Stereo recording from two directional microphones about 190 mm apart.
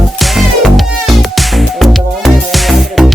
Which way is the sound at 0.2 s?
Centre (ahead or behind).